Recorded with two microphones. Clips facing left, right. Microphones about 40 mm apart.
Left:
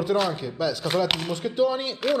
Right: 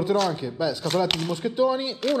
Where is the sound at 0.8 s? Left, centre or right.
Centre.